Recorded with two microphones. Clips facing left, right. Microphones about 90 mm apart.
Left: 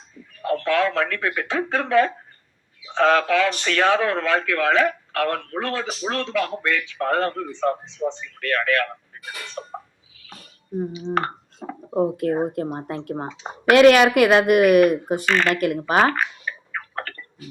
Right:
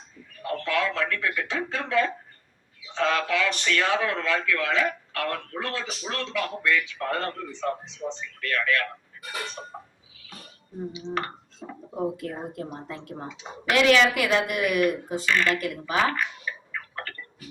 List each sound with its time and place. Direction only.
0.6 s a man's voice: 55° left (ahead or behind)
11.1 s speech: 50° left (ahead or behind)
15.6 s a sound: 55° left (ahead or behind)